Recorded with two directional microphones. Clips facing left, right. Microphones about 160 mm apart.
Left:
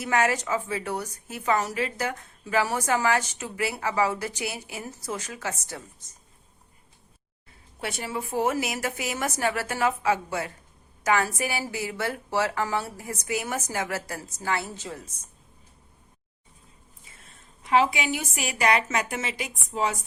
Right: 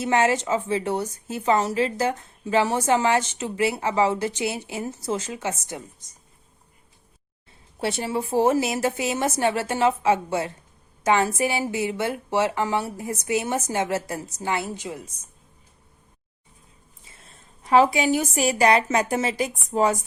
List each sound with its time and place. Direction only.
0.0 s a woman's voice: 25° right (ahead or behind)
7.8 s a woman's voice: 30° right (ahead or behind); by 15.2 s 10° right (ahead or behind)
17.7 s a woman's voice: 40° right (ahead or behind)